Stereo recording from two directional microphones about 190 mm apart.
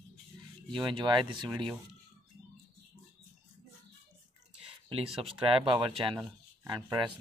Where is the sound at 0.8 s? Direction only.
25° right (ahead or behind).